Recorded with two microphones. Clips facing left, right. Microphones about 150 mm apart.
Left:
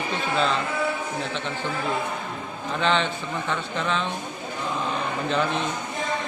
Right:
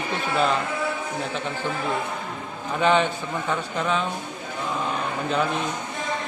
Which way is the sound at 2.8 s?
10° right (ahead or behind).